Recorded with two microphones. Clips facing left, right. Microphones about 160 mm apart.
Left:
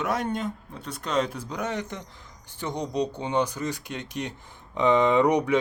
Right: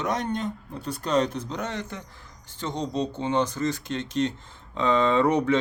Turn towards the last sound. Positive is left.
turn(degrees=15)  # may be behind; listen again after turning